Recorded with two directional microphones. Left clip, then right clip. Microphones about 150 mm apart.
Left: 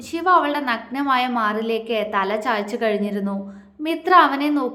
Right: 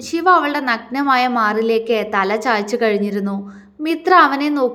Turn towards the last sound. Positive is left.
turn(degrees=-25)  # may be behind; listen again after turning